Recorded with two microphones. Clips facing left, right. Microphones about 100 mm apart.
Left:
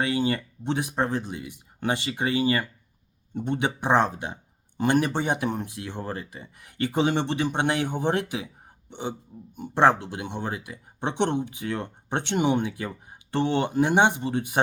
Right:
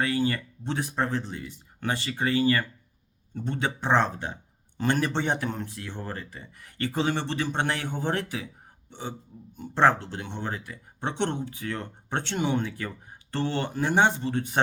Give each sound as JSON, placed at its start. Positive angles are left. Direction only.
{"t": 0.0, "sound": "speech", "side_deg": 20}